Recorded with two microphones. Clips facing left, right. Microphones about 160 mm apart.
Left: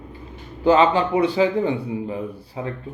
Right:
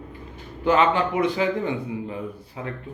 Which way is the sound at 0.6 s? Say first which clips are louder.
Left 3 dB; 30° left (ahead or behind).